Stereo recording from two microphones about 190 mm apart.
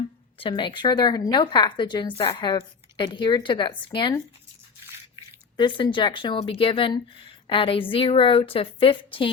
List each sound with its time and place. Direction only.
0.3 s a woman's voice: 25° left (ahead or behind)
5.5 s a woman's voice: 25° left (ahead or behind)